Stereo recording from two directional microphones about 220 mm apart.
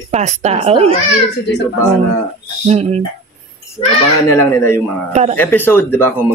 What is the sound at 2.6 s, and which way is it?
Speech, 30° right (ahead or behind).